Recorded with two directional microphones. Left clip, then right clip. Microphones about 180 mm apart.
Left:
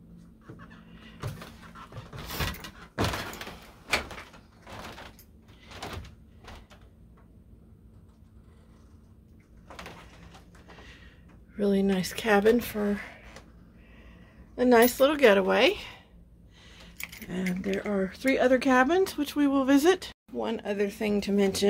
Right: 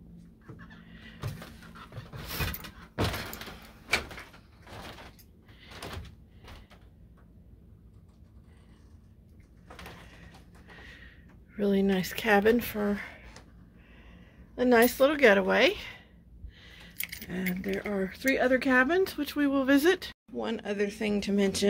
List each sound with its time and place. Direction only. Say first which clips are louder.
0.8 s chicken: right 1 dB; 5° left (ahead or behind)
10.7 s a sound: right 1 dB; centre (ahead or behind)
11.5 s speech: left 1 dB; centre (ahead or behind)
14.5 s speech: left 2 dB; 5° left (ahead or behind)
16.6 s keys jangling: right 1 dB; centre (ahead or behind)
16.9 s keys jangling: right 1 dB; 20° left (ahead or behind)
17.3 s speech: left 2 dB; 5° left (ahead or behind)